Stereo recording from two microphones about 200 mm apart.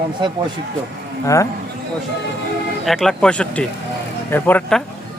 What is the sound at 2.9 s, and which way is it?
Speech, centre (ahead or behind).